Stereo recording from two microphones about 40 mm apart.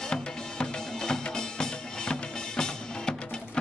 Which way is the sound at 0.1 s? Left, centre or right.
Centre.